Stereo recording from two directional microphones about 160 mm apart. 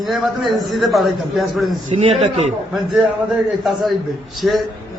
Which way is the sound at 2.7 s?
Centre (ahead or behind).